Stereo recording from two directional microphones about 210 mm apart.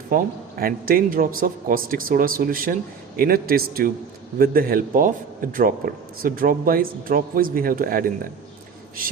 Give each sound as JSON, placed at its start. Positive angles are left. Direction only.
{"t": 0.6, "sound": "a man's voice", "side_deg": -45}